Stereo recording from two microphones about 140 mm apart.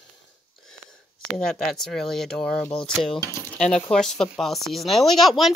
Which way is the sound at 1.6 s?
Centre (ahead or behind).